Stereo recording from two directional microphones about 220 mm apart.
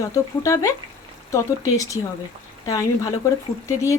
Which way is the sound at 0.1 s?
15° left (ahead or behind).